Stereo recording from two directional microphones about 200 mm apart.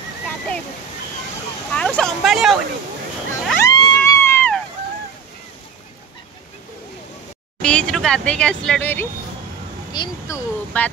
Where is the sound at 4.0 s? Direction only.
10° left (ahead or behind).